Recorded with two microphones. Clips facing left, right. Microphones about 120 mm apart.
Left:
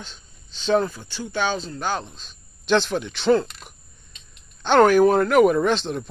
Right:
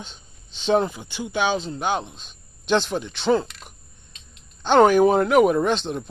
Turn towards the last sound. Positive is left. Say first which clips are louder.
# even
turn(degrees=0)  # may be behind; listen again after turning